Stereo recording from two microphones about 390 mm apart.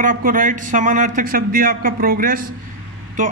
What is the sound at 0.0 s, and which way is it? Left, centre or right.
A man's voice, right.